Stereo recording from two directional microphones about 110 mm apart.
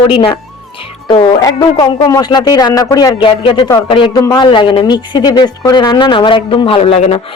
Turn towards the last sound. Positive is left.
turn(degrees=60)  # may be behind; listen again after turning